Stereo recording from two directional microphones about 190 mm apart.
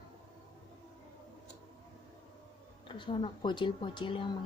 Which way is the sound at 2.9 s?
25° left (ahead or behind).